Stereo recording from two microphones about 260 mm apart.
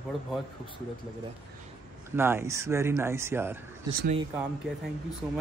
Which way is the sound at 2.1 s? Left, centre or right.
Centre.